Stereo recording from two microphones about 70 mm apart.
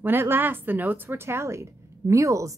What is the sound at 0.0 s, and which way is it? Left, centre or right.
Speech, right.